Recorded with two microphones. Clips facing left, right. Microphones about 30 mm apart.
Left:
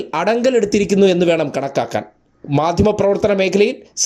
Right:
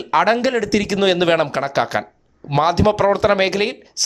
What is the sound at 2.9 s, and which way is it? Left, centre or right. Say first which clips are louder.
Speech: left 1 dB; right.